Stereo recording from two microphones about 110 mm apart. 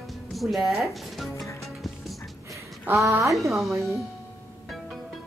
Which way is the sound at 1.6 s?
Centre (ahead or behind).